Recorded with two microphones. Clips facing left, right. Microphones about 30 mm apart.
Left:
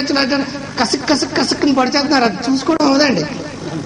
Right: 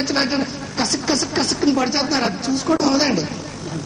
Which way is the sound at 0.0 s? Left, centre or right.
Left.